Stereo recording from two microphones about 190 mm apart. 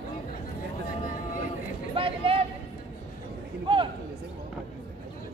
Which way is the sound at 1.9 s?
30° right (ahead or behind).